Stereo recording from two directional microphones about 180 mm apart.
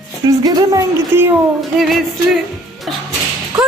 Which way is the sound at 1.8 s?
Centre (ahead or behind).